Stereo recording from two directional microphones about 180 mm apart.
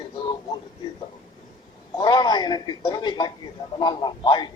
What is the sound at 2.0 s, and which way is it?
A man's voice, 25° left (ahead or behind).